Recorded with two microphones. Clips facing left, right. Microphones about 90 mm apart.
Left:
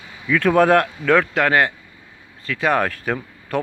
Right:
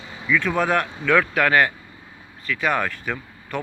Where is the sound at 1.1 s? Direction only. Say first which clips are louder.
Left 2 dB; 30° left (ahead or behind).